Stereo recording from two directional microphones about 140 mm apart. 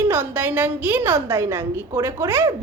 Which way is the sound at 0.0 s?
15° right (ahead or behind).